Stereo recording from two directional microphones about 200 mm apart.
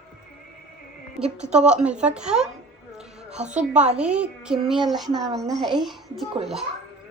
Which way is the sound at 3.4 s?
5° right (ahead or behind).